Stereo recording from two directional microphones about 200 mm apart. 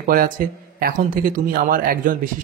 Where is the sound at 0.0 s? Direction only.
45° right (ahead or behind).